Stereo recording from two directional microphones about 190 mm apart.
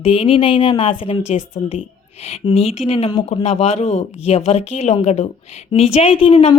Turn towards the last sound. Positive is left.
turn(degrees=30)  # may be behind; listen again after turning